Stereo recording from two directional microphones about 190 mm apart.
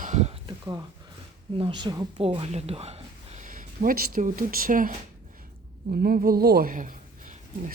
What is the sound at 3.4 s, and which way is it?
Speech, 45° right (ahead or behind).